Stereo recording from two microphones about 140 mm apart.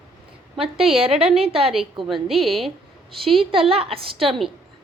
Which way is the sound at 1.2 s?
45° right (ahead or behind).